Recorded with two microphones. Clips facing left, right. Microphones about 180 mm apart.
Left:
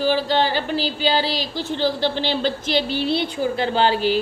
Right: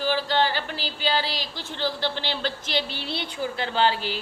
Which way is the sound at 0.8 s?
90° left.